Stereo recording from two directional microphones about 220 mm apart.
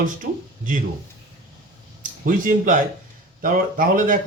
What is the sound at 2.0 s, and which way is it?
Speech, 35° right (ahead or behind).